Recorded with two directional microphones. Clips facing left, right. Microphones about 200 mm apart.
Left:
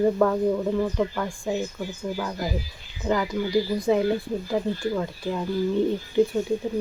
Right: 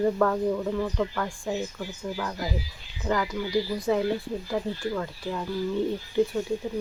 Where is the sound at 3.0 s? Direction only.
30° left (ahead or behind).